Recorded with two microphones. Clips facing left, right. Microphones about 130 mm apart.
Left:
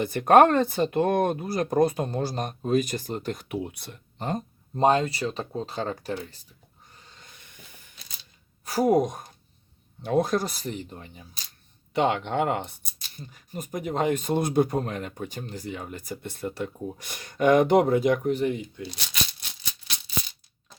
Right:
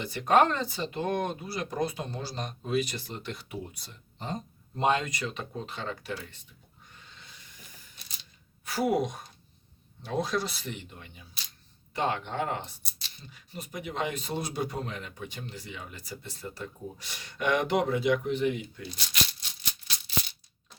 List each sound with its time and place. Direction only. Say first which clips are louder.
0.0 s speech: left 6 dB; 50° left (ahead or behind)
3.5 s speech: left 8 dB; 65° left (ahead or behind)
4.7 s speech: left 6 dB; 35° left (ahead or behind)
6.9 s snort: left 1 dB; 40° left (ahead or behind)
8.6 s speech: left 6 dB; 40° left (ahead or behind)
11.9 s speech: left 6 dB; 70° left (ahead or behind); by 18.9 s 35° left (ahead or behind)
18.9 s a sound: left 1 dB; 60° left (ahead or behind)